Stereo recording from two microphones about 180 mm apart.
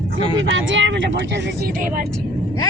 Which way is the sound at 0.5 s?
90° right.